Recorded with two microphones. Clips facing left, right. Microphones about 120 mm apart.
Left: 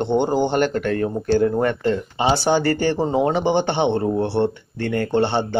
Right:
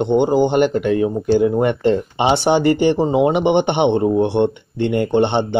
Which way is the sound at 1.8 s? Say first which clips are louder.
Right 4 dB; 25° right (ahead or behind).